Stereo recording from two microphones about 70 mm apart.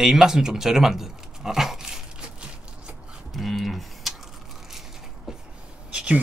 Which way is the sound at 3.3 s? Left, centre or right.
Centre.